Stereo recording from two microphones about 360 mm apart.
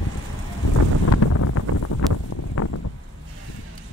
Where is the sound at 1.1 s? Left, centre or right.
Left.